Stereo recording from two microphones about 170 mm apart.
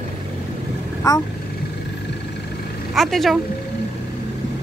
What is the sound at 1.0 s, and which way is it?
Speech, 20° left (ahead or behind).